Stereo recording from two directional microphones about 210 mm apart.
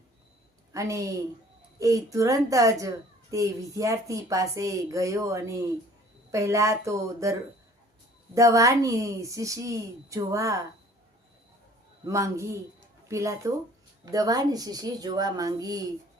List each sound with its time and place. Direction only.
0.7 s a woman's voice: 15° right (ahead or behind)
8.4 s a woman's voice: 15° right (ahead or behind)
12.0 s a woman's voice: 15° right (ahead or behind)